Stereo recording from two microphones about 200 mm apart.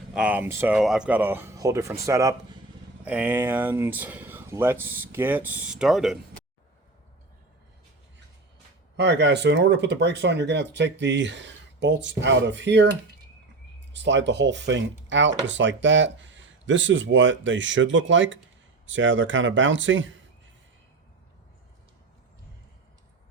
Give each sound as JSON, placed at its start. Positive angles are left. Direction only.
{"t": 0.1, "sound": "speech", "side_deg": -5}
{"t": 9.0, "sound": "speech", "side_deg": -60}